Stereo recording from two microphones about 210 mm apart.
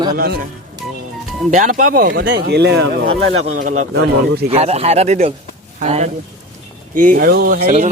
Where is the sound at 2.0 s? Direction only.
55° right (ahead or behind).